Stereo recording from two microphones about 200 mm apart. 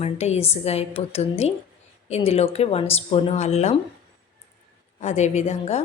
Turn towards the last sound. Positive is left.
turn(degrees=35)  # may be behind; listen again after turning